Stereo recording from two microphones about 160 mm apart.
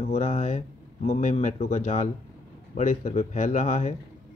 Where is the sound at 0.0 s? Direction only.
50° left (ahead or behind).